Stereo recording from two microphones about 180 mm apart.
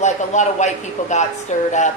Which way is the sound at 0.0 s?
40° left (ahead or behind).